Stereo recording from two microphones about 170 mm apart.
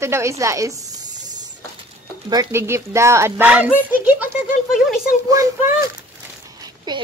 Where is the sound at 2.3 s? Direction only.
20° right (ahead or behind).